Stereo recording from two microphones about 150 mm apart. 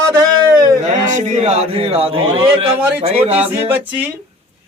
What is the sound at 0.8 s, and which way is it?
Speech, 55° right (ahead or behind).